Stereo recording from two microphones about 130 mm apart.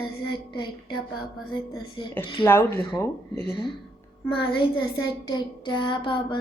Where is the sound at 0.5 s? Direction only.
35° left (ahead or behind).